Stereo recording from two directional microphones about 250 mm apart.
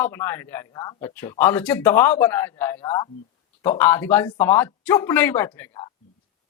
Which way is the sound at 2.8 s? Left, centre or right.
Left.